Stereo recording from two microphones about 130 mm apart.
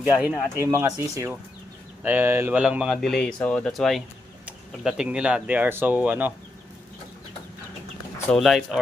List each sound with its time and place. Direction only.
0.0 s speech: 10° right (ahead or behind)
0.6 s speech: 20° right (ahead or behind)
2.6 s speech: 5° right (ahead or behind)
8.3 s speech: centre (ahead or behind)